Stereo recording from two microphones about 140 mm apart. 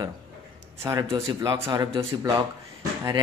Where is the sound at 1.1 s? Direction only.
20° right (ahead or behind).